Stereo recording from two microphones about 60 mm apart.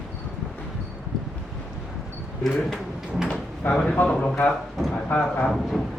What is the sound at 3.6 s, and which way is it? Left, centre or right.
Speech, left.